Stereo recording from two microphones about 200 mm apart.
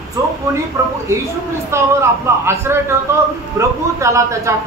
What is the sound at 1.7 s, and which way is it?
Speech, 15° right (ahead or behind).